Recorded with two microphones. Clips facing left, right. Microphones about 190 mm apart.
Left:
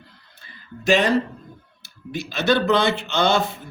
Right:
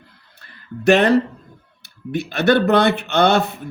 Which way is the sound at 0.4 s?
60° right (ahead or behind).